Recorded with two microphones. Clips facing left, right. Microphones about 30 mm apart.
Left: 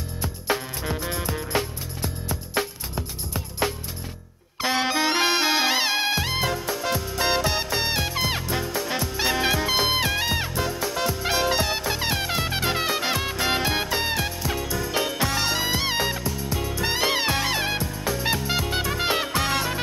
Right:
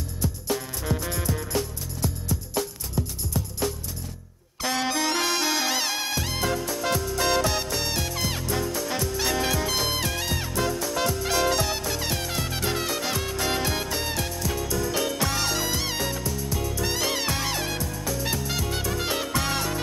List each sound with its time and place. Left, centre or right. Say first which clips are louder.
0.2 s music: left 2 dB; left